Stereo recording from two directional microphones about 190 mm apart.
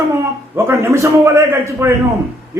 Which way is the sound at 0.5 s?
15° right (ahead or behind).